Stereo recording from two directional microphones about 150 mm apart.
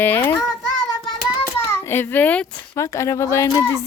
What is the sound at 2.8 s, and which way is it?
Speech, 20° left (ahead or behind).